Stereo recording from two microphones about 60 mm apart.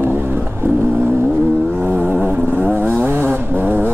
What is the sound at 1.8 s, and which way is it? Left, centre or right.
Vehicle, right.